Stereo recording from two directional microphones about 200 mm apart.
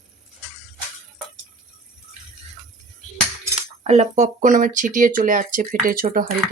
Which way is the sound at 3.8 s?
35° right (ahead or behind).